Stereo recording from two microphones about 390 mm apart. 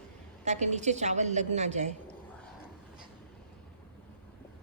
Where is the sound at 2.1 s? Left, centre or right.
Centre.